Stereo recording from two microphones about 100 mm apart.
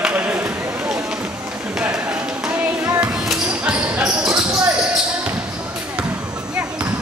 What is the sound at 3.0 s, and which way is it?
Basketball bounce, 5° right (ahead or behind).